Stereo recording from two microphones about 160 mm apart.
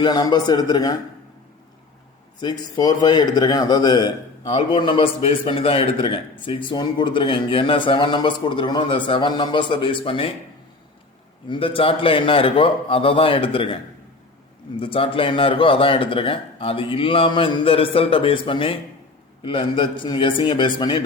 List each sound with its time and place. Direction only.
0.0 s a man's voice: 25° left (ahead or behind)
2.4 s a man's voice: 25° left (ahead or behind)
11.4 s a man's voice: 30° left (ahead or behind)
14.8 s a man's voice: 35° left (ahead or behind)